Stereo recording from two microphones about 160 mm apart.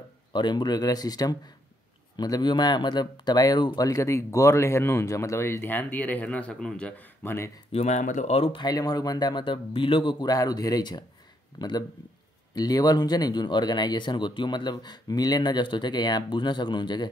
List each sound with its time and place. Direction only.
0.3 s speech: 30° left (ahead or behind)
7.7 s speech: 45° left (ahead or behind); by 17.1 s 30° left (ahead or behind)